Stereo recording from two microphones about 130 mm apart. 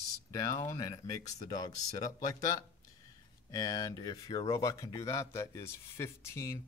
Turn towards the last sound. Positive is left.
turn(degrees=20)  # may be behind; listen again after turning